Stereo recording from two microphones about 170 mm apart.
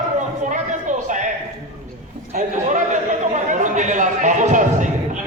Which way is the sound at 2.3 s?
45° right (ahead or behind).